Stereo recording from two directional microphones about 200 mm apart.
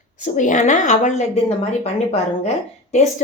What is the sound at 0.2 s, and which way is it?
Speech, 40° left (ahead or behind).